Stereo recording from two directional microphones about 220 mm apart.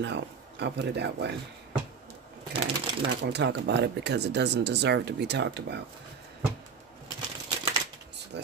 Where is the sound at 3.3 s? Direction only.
50° right (ahead or behind).